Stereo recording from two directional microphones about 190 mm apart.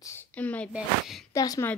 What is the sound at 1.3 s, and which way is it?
Speech, 15° left (ahead or behind).